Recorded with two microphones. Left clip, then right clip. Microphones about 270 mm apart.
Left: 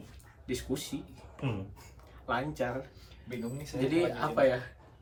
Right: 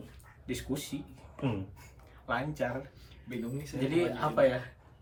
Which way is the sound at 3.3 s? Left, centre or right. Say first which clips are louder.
Even; centre.